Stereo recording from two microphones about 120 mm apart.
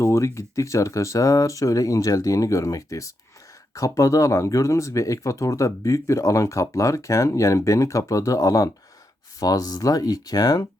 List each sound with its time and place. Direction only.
0.0 s speech: 25° left (ahead or behind)